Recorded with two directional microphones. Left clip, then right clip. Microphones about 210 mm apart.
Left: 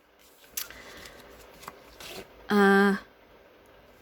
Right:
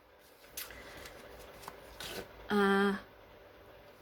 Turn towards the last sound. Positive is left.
turn(degrees=55)  # may be behind; listen again after turning